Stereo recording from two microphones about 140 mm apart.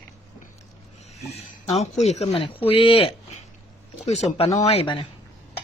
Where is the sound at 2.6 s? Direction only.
40° left (ahead or behind).